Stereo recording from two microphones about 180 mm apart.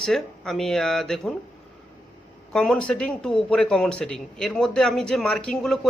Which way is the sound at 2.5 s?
5° left (ahead or behind).